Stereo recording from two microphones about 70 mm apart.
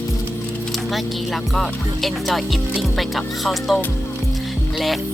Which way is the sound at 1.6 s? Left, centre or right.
Centre.